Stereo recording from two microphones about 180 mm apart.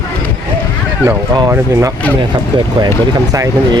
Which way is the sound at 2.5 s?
25° right (ahead or behind).